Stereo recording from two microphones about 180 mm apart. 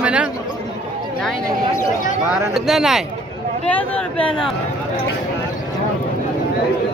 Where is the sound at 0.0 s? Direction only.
5° right (ahead or behind).